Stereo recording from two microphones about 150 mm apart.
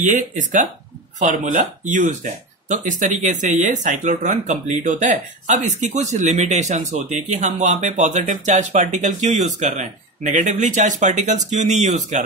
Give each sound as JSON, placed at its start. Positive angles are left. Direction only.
{"t": 0.0, "sound": "speech", "side_deg": -55}